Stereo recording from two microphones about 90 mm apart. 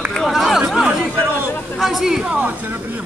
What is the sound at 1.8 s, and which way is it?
Speech, 5° right (ahead or behind).